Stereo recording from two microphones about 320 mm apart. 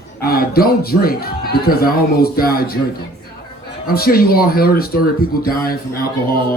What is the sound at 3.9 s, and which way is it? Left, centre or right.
A man's voice, left.